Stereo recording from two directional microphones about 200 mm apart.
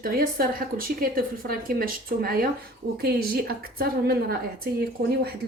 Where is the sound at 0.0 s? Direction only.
45° right (ahead or behind).